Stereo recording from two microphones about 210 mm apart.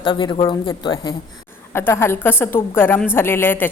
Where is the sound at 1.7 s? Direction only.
10° left (ahead or behind).